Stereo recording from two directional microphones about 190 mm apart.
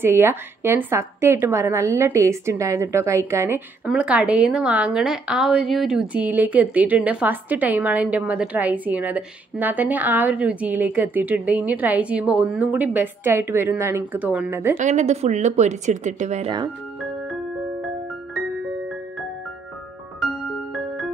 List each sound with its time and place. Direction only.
0.0 s a woman's voice: 10° right (ahead or behind)
14.8 s speech: 35° right (ahead or behind)